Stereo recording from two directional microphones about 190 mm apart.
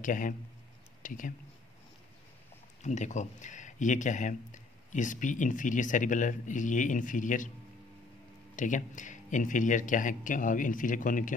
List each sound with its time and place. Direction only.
0.0 s speech: 45° left (ahead or behind)
2.8 s speech: 40° left (ahead or behind)
8.5 s speech: 40° left (ahead or behind)